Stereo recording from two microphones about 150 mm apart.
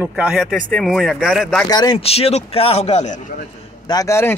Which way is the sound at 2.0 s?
40° left (ahead or behind).